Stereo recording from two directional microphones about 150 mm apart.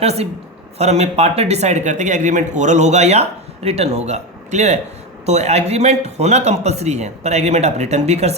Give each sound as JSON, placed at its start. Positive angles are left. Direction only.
{"t": 0.0, "sound": "speech", "side_deg": -45}